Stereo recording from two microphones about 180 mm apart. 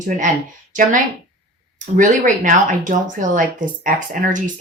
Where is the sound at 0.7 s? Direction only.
45° right (ahead or behind).